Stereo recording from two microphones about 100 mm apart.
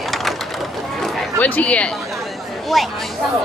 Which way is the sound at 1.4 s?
15° left (ahead or behind).